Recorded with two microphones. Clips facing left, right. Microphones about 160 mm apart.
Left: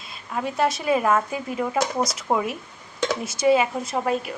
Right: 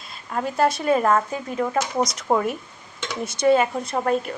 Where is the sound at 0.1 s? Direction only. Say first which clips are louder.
Right 1 dB; centre (ahead or behind).